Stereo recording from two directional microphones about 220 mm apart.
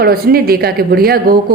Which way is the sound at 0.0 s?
45° right (ahead or behind).